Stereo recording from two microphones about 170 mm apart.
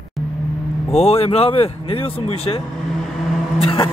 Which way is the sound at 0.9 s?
35° left (ahead or behind).